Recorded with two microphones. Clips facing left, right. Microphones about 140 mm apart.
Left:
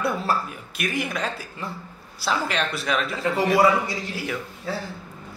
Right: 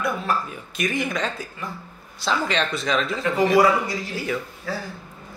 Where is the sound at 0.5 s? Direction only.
5° left (ahead or behind).